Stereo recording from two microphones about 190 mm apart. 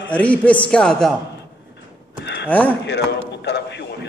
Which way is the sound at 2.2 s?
65° left (ahead or behind).